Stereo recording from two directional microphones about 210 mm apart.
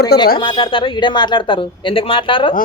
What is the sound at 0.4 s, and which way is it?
Speech, 25° left (ahead or behind).